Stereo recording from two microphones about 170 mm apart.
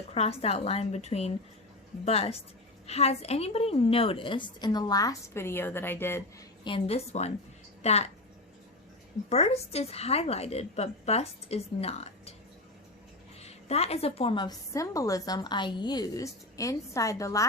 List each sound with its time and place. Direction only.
0.1 s a woman's voice: 35° left (ahead or behind); by 6.2 s 15° left (ahead or behind)
6.7 s a woman's voice: 35° left (ahead or behind)
9.3 s a woman's voice: 40° left (ahead or behind)
13.4 s a woman's voice: 40° left (ahead or behind); by 17.4 s 20° left (ahead or behind)